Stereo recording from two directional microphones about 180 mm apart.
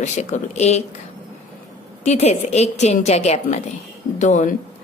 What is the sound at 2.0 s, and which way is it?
A woman's voice, 40° left (ahead or behind).